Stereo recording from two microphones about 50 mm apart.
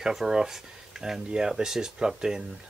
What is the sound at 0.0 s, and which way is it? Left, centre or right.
Speech, centre.